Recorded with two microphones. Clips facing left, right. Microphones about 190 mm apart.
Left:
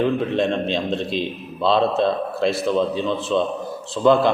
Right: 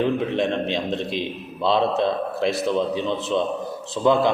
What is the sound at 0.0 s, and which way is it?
A man's voice, 15° right (ahead or behind).